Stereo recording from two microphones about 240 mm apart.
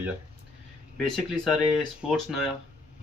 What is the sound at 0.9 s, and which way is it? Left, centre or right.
Speech, centre.